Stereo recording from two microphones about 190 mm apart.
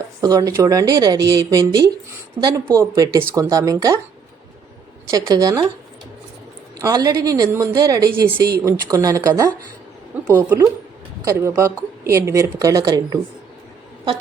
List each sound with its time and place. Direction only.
0.2 s a woman's voice: 20° right (ahead or behind)
5.1 s a woman's voice: 20° right (ahead or behind)
6.8 s a woman's voice: 20° right (ahead or behind)